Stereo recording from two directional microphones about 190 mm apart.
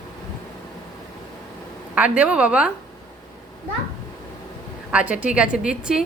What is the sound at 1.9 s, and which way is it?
Speech, 5° right (ahead or behind).